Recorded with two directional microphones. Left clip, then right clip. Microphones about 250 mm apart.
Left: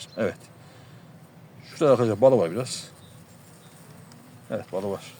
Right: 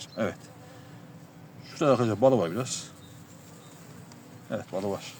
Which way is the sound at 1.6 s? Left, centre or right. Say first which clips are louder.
Left 4 dB; left.